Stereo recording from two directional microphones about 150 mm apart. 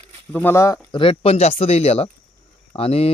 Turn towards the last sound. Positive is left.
turn(degrees=40)  # may be behind; listen again after turning